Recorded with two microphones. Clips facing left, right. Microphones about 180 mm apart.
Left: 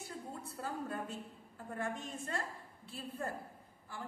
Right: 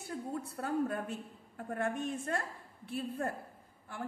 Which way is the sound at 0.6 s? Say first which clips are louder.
Right 6 dB; 60° right (ahead or behind).